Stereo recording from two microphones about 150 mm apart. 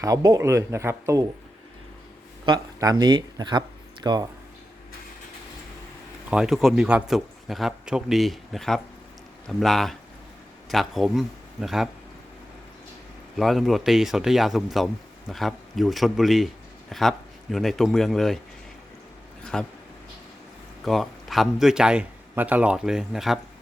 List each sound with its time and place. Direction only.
0.0 s speech: 25° right (ahead or behind)
2.5 s speech: 25° right (ahead or behind)
6.3 s a man's voice: 5° right (ahead or behind)
13.3 s a man's voice: centre (ahead or behind)
19.5 s a man's voice: 5° left (ahead or behind)
20.8 s a man's voice: centre (ahead or behind)